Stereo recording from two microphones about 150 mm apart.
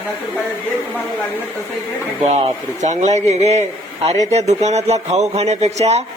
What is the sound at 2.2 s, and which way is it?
A man's voice, 50° right (ahead or behind).